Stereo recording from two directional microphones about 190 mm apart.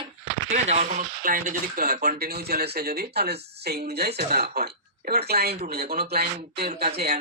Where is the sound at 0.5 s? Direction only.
35° right (ahead or behind); by 6.7 s 55° right (ahead or behind).